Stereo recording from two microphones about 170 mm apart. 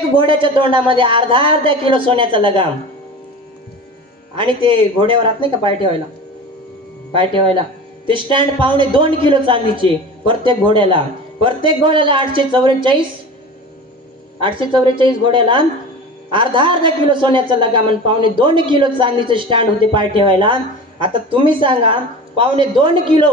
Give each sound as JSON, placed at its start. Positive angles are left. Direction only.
{"t": 0.1, "sound": "speech", "side_deg": -30}
{"t": 4.4, "sound": "speech", "side_deg": -30}
{"t": 7.2, "sound": "a woman's voice", "side_deg": -30}
{"t": 14.4, "sound": "a woman's voice", "side_deg": -30}